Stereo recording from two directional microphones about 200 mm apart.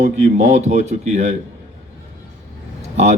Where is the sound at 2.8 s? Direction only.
35° right (ahead or behind).